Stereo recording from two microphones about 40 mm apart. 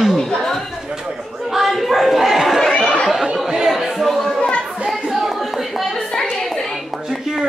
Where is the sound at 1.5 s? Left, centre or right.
Centre.